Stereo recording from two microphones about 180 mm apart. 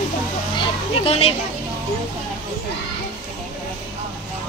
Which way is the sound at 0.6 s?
30° left (ahead or behind).